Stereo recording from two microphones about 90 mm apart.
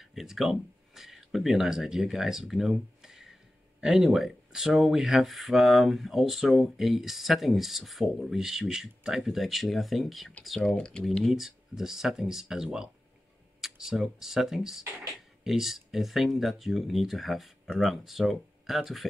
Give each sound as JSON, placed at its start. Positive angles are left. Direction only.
{"t": 0.0, "sound": "speech", "side_deg": -5}